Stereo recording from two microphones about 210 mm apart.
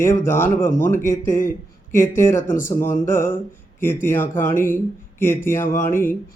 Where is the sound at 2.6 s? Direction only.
15° left (ahead or behind).